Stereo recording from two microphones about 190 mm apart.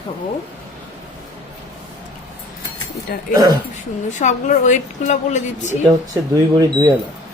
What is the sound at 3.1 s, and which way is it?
A woman's voice, 50° left (ahead or behind).